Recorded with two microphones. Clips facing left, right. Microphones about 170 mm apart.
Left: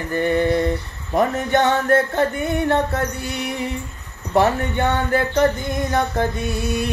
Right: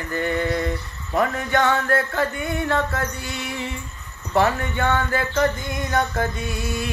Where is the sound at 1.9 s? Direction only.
20° left (ahead or behind).